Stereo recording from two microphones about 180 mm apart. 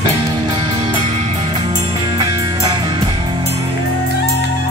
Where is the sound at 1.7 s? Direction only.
25° right (ahead or behind).